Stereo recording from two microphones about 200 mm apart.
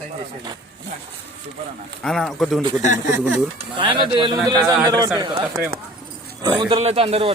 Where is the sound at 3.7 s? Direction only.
25° right (ahead or behind).